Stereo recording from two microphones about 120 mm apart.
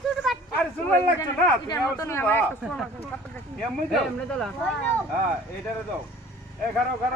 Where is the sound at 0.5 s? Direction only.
15° left (ahead or behind).